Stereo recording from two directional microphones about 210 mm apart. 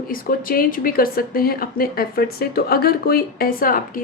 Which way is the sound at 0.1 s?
45° left (ahead or behind).